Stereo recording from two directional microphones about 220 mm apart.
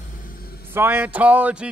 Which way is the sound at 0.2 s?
40° left (ahead or behind).